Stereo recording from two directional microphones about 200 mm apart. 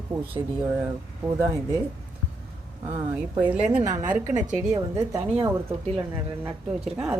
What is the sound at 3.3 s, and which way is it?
A woman's voice, 10° right (ahead or behind).